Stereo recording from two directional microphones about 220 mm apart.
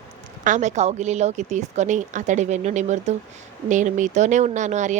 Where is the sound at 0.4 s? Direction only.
35° right (ahead or behind).